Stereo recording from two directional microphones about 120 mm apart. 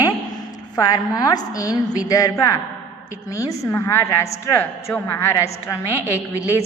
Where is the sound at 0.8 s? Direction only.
30° left (ahead or behind).